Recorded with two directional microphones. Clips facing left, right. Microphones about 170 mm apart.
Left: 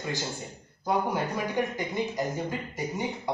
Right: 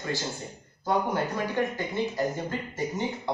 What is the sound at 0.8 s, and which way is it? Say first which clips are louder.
Speech: right 1 dB; 10° left (ahead or behind).